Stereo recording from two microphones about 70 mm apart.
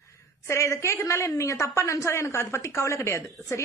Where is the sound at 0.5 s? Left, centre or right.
Left.